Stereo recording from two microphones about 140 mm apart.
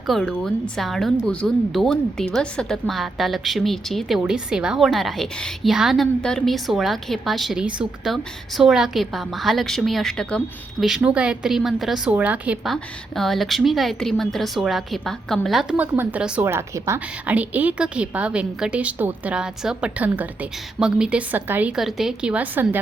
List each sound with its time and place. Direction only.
0.1 s a woman's voice: 5° left (ahead or behind)
12.7 s a woman's voice: centre (ahead or behind)
15.8 s a woman's voice: 15° right (ahead or behind)